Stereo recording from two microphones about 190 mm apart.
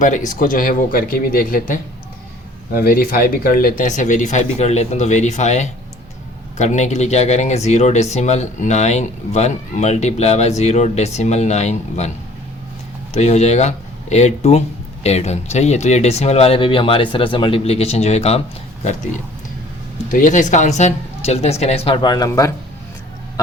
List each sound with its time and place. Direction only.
0.0 s speech: 45° left (ahead or behind)
13.1 s speech: 35° left (ahead or behind)
20.1 s speech: 45° left (ahead or behind); by 22.5 s 15° left (ahead or behind)